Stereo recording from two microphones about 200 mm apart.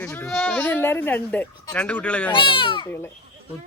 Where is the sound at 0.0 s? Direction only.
10° left (ahead or behind).